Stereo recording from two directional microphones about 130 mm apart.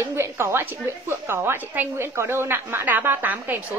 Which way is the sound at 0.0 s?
20° right (ahead or behind).